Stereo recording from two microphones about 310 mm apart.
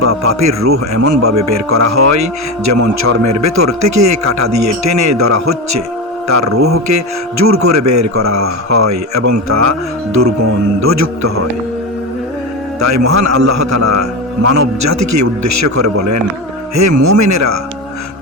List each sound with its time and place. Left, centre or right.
0.0 s speech: right
12.8 s speech: right